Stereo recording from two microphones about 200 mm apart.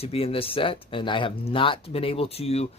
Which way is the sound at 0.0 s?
30° left (ahead or behind).